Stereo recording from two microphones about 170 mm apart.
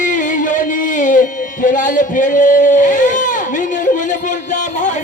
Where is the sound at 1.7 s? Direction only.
50° left (ahead or behind).